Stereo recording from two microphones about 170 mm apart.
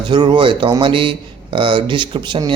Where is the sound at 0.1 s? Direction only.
30° right (ahead or behind).